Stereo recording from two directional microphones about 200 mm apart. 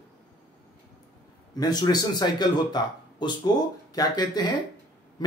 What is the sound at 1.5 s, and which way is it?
Speech, 20° left (ahead or behind).